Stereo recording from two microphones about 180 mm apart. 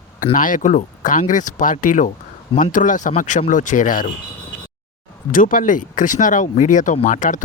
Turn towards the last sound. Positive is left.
turn(degrees=45)  # may be behind; listen again after turning